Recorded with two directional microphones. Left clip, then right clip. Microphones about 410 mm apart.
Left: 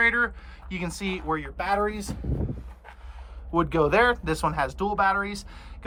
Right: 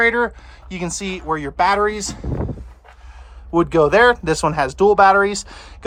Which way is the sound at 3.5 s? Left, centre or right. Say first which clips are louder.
Right 8 dB; centre.